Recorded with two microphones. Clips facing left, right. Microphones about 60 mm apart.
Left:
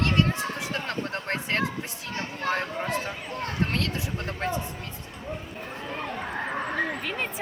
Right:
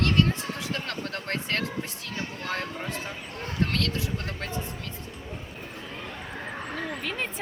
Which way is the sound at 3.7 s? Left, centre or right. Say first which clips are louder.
Even; left.